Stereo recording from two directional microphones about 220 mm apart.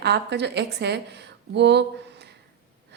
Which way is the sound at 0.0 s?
50° right (ahead or behind).